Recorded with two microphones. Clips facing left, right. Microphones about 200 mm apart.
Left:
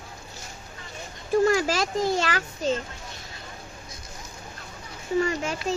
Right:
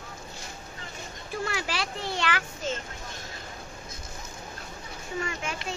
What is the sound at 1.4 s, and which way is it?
A child's voice, 40° left (ahead or behind).